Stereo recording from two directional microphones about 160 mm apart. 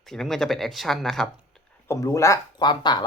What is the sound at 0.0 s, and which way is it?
Speech, centre (ahead or behind).